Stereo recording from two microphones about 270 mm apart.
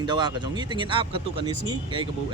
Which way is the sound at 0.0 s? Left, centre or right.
Centre.